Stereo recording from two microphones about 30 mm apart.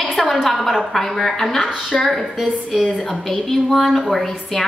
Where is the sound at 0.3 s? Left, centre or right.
Centre.